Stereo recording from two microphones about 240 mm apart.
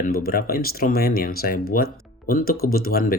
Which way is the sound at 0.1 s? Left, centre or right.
Left.